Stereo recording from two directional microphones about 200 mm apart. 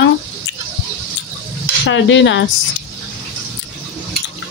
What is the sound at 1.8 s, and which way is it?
Speech, 65° left (ahead or behind).